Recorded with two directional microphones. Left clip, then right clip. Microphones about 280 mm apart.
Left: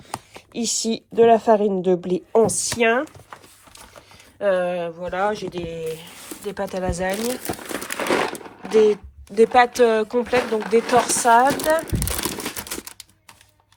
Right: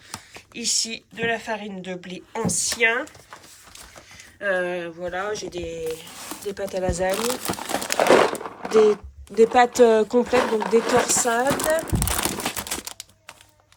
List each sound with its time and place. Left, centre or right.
0.3 s a woman's voice: centre
4.4 s a woman's voice: centre
7.5 s crumpling: right
8.3 s sewing machine: centre